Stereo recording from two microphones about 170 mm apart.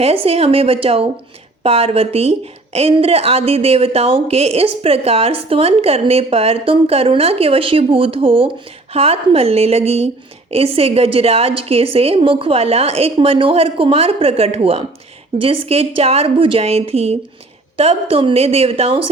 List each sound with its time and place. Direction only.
0.0 s speech: 35° right (ahead or behind)